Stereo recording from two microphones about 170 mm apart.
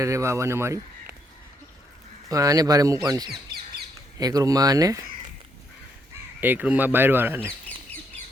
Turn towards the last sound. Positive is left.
turn(degrees=-10)  # may be behind; listen again after turning